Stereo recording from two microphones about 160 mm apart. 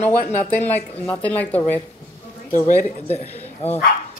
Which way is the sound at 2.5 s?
50° left (ahead or behind).